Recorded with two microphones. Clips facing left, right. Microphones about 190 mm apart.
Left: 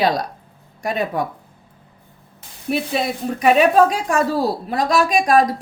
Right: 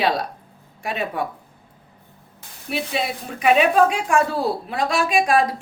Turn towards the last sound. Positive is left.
turn(degrees=40)  # may be behind; listen again after turning